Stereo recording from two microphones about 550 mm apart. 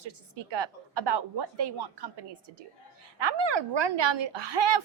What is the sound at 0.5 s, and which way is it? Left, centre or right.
A woman's voice, right.